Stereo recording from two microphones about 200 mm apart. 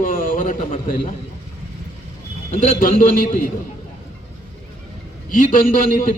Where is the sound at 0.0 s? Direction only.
45° left (ahead or behind).